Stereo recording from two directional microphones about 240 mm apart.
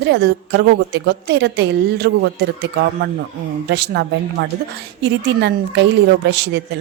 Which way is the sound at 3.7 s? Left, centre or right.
Right.